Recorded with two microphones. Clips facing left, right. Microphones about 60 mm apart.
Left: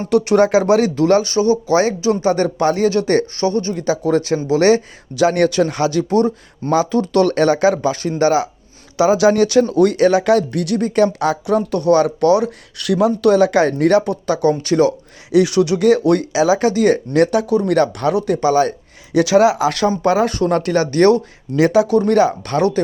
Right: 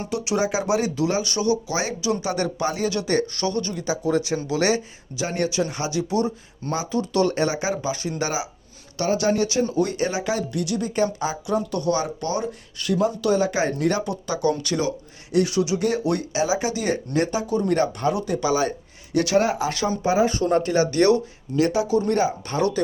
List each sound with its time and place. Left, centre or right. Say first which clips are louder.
0.1 s speech: left 12 dB; left
1.2 s speech: left 7 dB; left
3.3 s speech: left 7 dB; left
3.8 s speech: left 6 dB; left
4.4 s speech: left 9 dB; left
5.1 s speech: left 10 dB; left
9.1 s speech: left 7 dB; left
15.4 s speech: left 7 dB; left
17.2 s speech: left 8 dB; left
18.3 s speech: left 8 dB; left
19.2 s speech: left 8 dB; left
20.0 s speech: left 5 dB; left
20.9 s speech: left 7 dB; left
21.5 s speech: left 7 dB; left